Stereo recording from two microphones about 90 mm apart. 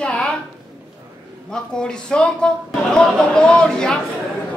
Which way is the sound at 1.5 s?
10° left (ahead or behind).